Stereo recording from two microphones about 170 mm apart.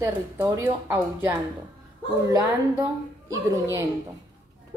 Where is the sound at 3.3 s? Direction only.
20° right (ahead or behind).